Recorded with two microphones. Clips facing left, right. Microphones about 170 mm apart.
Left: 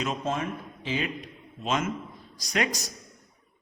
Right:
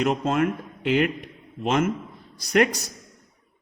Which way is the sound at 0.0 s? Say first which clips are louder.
Right 7 dB; 70° right (ahead or behind).